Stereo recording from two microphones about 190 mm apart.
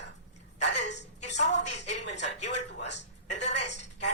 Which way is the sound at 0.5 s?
35° left (ahead or behind).